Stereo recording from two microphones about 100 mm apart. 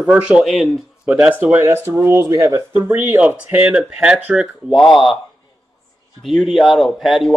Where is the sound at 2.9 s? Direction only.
20° right (ahead or behind).